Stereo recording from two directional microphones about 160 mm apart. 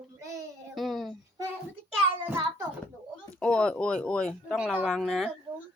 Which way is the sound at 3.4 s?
5° left (ahead or behind).